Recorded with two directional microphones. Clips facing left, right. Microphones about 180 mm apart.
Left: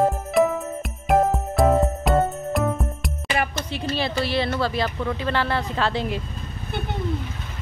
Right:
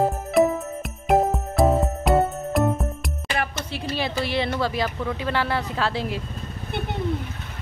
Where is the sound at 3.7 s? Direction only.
10° right (ahead or behind).